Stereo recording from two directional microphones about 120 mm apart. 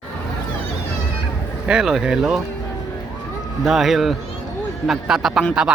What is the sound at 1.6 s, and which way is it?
Speech, 5° right (ahead or behind).